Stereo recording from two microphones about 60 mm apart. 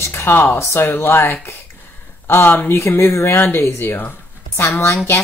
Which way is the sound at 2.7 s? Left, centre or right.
Left.